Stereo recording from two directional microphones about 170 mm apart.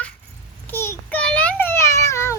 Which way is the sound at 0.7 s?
15° left (ahead or behind).